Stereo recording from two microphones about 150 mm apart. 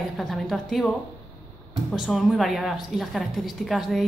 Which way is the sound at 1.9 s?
Centre (ahead or behind).